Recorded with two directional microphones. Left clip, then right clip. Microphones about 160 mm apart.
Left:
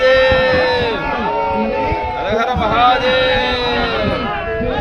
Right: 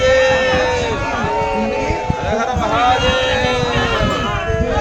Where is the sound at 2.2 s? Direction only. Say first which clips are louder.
Left 2 dB; 55° left (ahead or behind).